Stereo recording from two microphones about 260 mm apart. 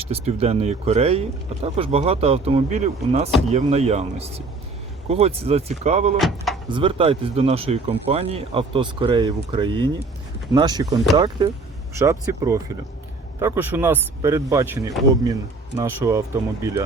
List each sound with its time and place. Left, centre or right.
0.0 s speech: right
6.1 s speech: centre
6.7 s speech: centre
10.8 s speech: centre
11.9 s speech: centre